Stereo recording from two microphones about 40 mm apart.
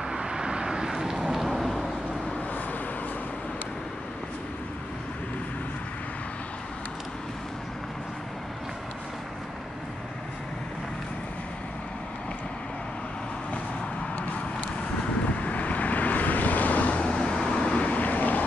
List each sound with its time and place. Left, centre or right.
0.1 s vehicle: centre
15.4 s vehicle: left
17.0 s vehicle: left